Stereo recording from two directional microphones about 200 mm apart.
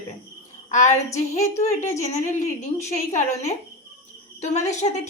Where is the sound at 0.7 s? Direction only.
35° left (ahead or behind).